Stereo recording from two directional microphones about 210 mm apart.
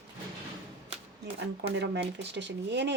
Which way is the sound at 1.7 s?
55° right (ahead or behind).